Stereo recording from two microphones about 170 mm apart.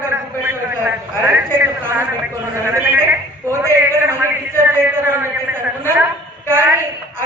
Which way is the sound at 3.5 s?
15° right (ahead or behind).